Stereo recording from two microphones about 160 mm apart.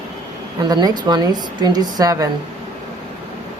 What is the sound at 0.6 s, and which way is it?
A woman's voice, 25° right (ahead or behind).